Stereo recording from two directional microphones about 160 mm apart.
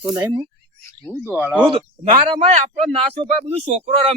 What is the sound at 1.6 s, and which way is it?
Speech, 30° right (ahead or behind).